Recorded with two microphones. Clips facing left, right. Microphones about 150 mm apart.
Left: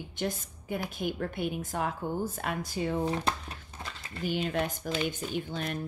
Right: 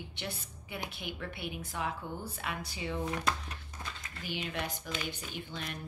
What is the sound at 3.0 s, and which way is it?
Speech, 30° left (ahead or behind).